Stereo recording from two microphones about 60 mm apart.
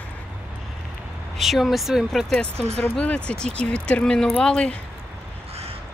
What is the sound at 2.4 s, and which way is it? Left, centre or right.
Speech, centre.